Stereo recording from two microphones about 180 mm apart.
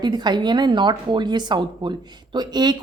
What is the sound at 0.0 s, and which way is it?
A woman's voice, 25° right (ahead or behind).